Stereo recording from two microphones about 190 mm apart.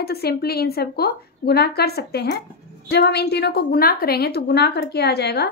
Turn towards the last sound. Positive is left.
turn(degrees=60)  # may be behind; listen again after turning